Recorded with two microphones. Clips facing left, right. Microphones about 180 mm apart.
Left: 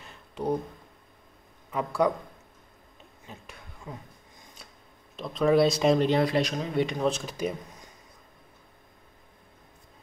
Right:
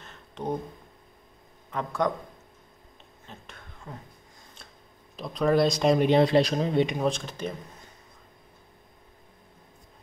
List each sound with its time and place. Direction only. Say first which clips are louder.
0.0 s a sound: left 3 dB; 10° left (ahead or behind)
1.7 s speech: left 2 dB; 10° left (ahead or behind)
3.3 s a sound: left 1 dB; 10° left (ahead or behind)
5.1 s speech: left 1 dB; centre (ahead or behind)
5.9 s speech: right 3 dB; 20° right (ahead or behind)
7.1 s speech: left 1 dB; 5° left (ahead or behind)